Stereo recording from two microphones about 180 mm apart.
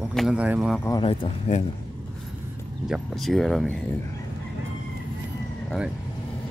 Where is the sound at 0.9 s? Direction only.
25° left (ahead or behind).